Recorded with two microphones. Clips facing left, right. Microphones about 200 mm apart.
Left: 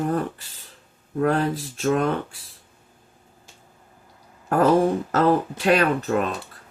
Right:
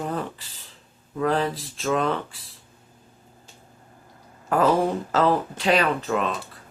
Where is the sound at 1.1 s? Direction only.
55° left (ahead or behind).